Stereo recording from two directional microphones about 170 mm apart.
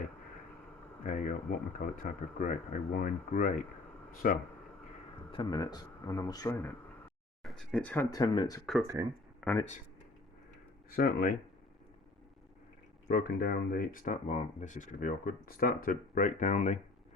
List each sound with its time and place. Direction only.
1.0 s speech: 45° left (ahead or behind)
5.3 s a man's voice: 25° left (ahead or behind)
7.4 s speech: 5° left (ahead or behind)
8.1 s a man's voice: 25° left (ahead or behind)
9.4 s speech: centre (ahead or behind)
10.9 s speech: 55° left (ahead or behind)
13.1 s speech: 60° left (ahead or behind); by 16.8 s 45° left (ahead or behind)